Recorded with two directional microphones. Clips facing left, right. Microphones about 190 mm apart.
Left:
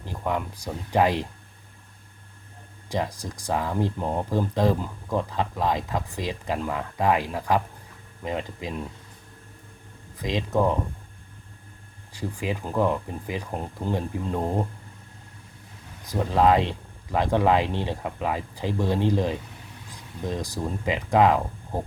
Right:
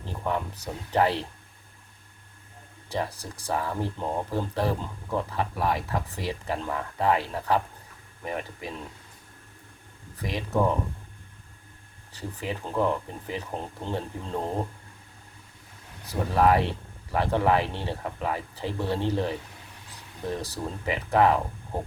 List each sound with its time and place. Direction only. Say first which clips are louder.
0.1 s speech: left 1 dB; 15° left (ahead or behind)
2.9 s speech: left 3 dB; 15° left (ahead or behind)
10.2 s speech: left 2 dB; 15° left (ahead or behind)
12.1 s speech: left 4 dB; 15° left (ahead or behind)
16.0 s speech: left 2 dB; 20° left (ahead or behind)